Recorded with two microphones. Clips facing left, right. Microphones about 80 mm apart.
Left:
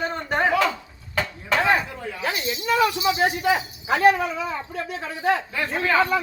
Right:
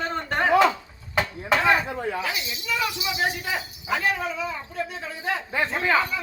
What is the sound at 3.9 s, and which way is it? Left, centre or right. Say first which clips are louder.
Speech: left 8 dB; left.